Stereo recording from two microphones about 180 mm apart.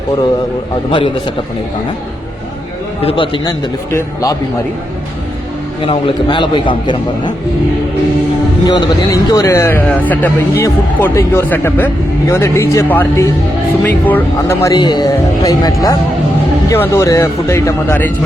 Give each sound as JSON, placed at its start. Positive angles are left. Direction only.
{"t": 0.9, "sound": "a man's voice", "side_deg": 30}
{"t": 3.0, "sound": "a man's voice", "side_deg": 30}
{"t": 5.8, "sound": "a man's voice", "side_deg": 30}
{"t": 8.6, "sound": "a man's voice", "side_deg": 20}